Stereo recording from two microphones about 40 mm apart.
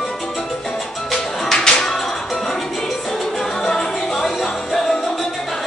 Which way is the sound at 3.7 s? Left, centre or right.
Centre.